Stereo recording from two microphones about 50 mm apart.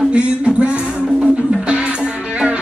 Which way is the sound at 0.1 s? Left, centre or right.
Right.